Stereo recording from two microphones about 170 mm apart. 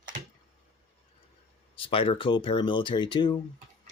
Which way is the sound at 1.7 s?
30° left (ahead or behind).